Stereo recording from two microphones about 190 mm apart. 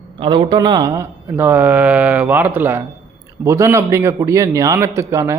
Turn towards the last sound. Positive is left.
turn(degrees=-15)  # may be behind; listen again after turning